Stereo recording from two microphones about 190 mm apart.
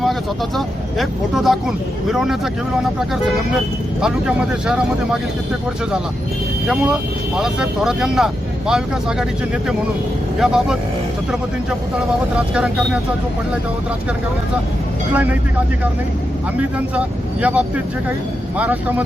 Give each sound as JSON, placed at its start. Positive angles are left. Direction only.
{"t": 0.0, "sound": "speech", "side_deg": 0}
{"t": 4.0, "sound": "speech", "side_deg": -5}
{"t": 7.3, "sound": "speech", "side_deg": -5}
{"t": 10.4, "sound": "speech", "side_deg": -5}
{"t": 12.5, "sound": "speech", "side_deg": -5}
{"t": 15.1, "sound": "speech", "side_deg": -10}
{"t": 16.6, "sound": "speech", "side_deg": -5}